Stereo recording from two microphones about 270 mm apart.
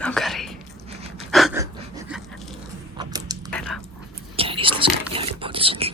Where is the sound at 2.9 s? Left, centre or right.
Centre.